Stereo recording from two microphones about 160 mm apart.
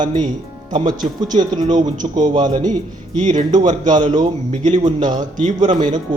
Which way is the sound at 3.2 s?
45° right (ahead or behind).